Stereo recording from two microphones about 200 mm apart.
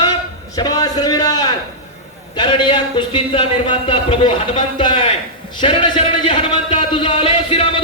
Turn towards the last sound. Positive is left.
turn(degrees=30)  # may be behind; listen again after turning